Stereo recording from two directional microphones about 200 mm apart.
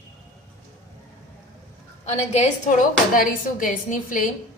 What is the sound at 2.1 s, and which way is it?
A woman's voice, 35° left (ahead or behind).